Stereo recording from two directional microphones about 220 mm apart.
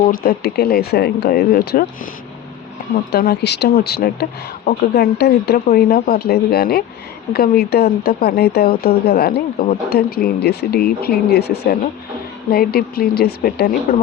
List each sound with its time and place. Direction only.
0.1 s speech: 40° left (ahead or behind)
3.1 s speech: 45° left (ahead or behind)